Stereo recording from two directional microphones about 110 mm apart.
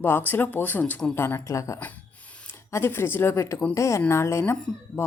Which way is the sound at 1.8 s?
15° left (ahead or behind).